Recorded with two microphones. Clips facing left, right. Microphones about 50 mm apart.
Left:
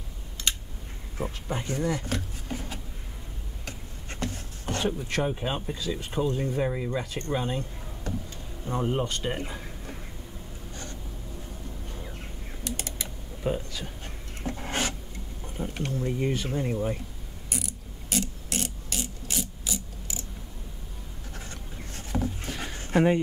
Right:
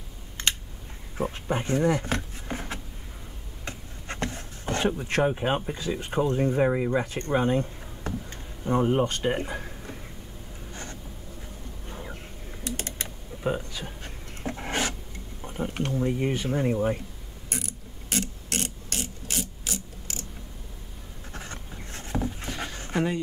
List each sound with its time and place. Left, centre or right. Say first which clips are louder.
0.4 s a sound: right 3 dB; right
3.6 s speech: right 5 dB; right
10.7 s writing: right 2 dB; right
12.6 s typing: right 2 dB; right
13.4 s speech: right 1 dB; right
14.4 s writing: right 1 dB; right
15.4 s a sound: right 3 dB; right
15.7 s speech: right 2 dB; right
16.0 s speech: right 2 dB; right
16.3 s speech: right 3 dB; right
18.1 s mechanisms: even; right
21.3 s writing: right 3 dB; right
22.1 s a sound: even; centre
22.9 s speech: left 5 dB; left